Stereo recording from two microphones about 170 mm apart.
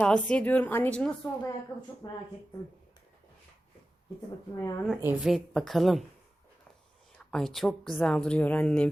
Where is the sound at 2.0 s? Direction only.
25° left (ahead or behind).